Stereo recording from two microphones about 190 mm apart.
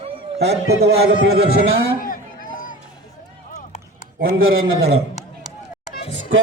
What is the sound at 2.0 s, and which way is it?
Run, 45° left (ahead or behind).